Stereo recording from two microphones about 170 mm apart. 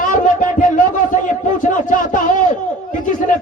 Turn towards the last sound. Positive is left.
turn(degrees=50)  # may be behind; listen again after turning